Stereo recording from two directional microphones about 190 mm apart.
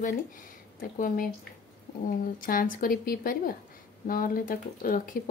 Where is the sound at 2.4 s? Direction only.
45° left (ahead or behind).